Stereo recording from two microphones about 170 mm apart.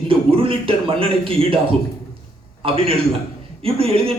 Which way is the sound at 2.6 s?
35° right (ahead or behind).